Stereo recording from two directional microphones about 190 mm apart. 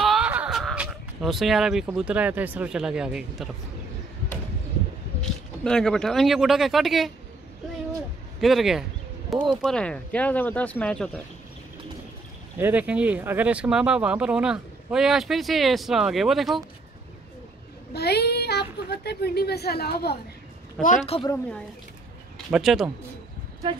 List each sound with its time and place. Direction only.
0.0 s speech: 5° right (ahead or behind)
5.2 s speech: 5° left (ahead or behind)
8.4 s speech: centre (ahead or behind)
12.5 s speech: 10° right (ahead or behind)
17.9 s speech: 60° left (ahead or behind)
20.8 s a woman's voice: 40° left (ahead or behind)
21.3 s speech: 5° left (ahead or behind)